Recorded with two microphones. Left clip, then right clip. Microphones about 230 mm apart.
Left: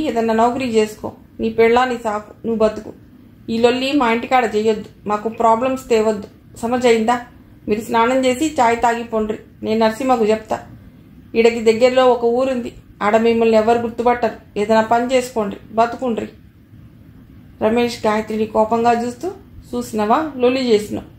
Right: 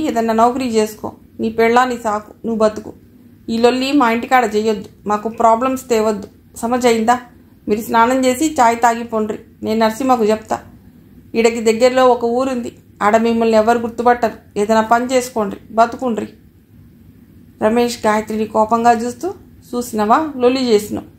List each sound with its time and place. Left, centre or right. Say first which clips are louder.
0.0 s a woman's voice: right 2 dB; right
17.6 s a woman's voice: right 2 dB; right